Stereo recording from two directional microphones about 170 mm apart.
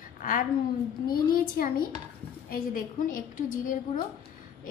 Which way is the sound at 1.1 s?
55° left (ahead or behind).